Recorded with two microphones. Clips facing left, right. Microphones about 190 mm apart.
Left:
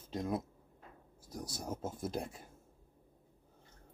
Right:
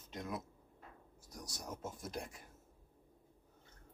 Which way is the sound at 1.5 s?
25° left (ahead or behind).